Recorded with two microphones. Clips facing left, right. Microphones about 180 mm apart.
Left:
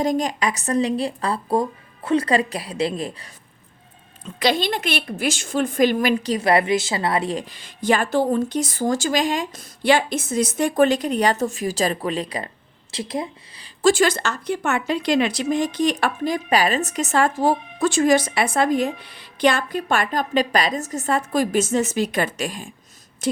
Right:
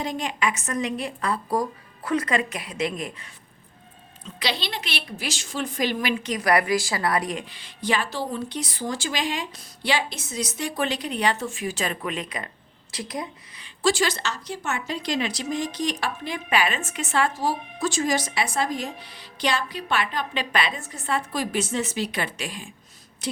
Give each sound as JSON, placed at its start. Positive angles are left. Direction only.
{"t": 0.0, "sound": "a woman's voice", "side_deg": 40}
{"t": 4.4, "sound": "a woman's voice", "side_deg": 50}
{"t": 13.8, "sound": "a woman's voice", "side_deg": 50}
{"t": 23.2, "sound": "a sound", "side_deg": 50}